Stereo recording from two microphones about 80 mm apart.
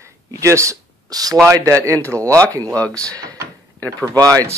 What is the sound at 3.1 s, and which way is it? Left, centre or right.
Door, right.